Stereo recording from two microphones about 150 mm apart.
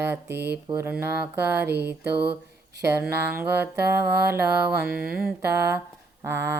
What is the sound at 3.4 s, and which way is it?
Speech, 15° right (ahead or behind).